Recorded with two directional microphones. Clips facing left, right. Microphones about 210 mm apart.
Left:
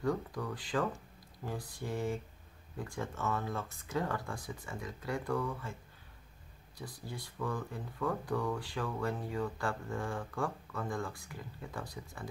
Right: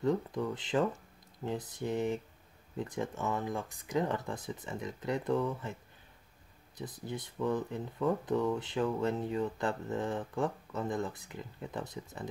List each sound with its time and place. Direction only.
0.0 s speech: 20° right (ahead or behind)
6.8 s speech: 20° right (ahead or behind)